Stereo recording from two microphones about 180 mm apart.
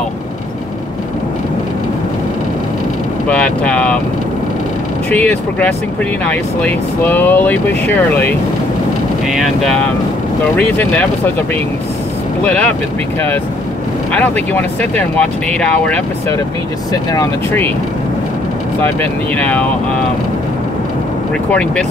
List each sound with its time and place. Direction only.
3.3 s vehicle: 5° left (ahead or behind)
5.1 s speech: 10° left (ahead or behind)
9.3 s speech: centre (ahead or behind)
10.6 s speech: 10° left (ahead or behind)
12.4 s speech: 5° left (ahead or behind)
14.1 s speech: 10° left (ahead or behind)
16.9 s speech: 20° left (ahead or behind)
18.8 s speech: 10° left (ahead or behind)
21.5 s speech: 5° left (ahead or behind)